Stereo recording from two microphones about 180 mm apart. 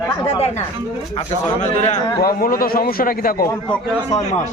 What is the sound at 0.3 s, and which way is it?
Speech, 35° left (ahead or behind).